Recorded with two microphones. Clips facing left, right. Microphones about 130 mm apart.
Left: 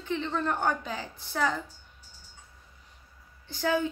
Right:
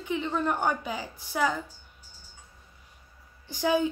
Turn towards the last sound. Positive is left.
turn(degrees=-15)  # may be behind; listen again after turning